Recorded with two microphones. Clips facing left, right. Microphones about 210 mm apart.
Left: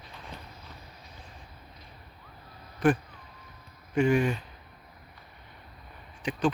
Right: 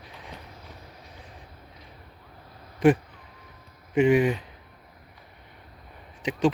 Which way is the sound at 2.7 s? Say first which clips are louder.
Right 5 dB; 20° right (ahead or behind).